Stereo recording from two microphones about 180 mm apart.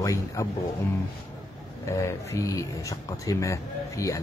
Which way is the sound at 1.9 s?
15° left (ahead or behind).